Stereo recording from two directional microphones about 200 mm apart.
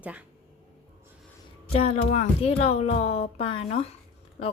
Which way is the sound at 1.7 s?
30° left (ahead or behind).